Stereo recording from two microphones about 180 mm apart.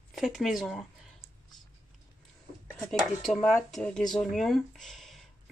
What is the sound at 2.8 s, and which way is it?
Speech, centre (ahead or behind).